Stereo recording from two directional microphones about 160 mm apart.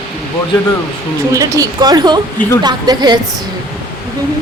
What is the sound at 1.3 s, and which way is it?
Speech, 20° right (ahead or behind).